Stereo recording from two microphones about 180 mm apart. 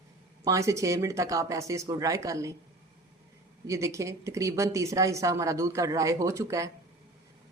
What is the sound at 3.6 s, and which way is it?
A woman's voice, 15° right (ahead or behind).